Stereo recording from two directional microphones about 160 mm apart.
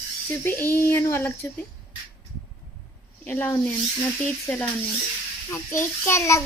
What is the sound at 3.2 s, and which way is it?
Speech, 15° left (ahead or behind).